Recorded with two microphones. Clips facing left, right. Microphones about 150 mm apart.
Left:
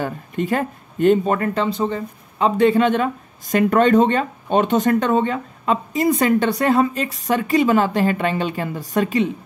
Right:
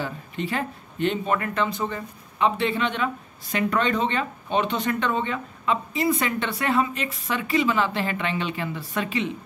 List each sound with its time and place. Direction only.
0.0 s speech: 45° left (ahead or behind)